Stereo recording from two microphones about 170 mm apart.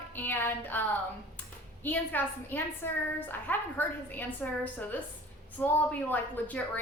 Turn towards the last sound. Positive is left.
turn(degrees=10)  # may be behind; listen again after turning